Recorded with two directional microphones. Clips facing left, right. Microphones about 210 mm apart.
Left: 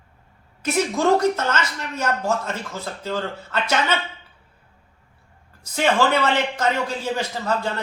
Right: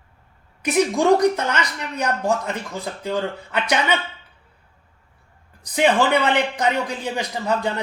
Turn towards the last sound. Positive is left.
turn(degrees=-15)  # may be behind; listen again after turning